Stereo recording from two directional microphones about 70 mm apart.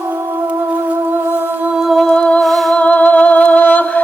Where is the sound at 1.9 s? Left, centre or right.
Centre.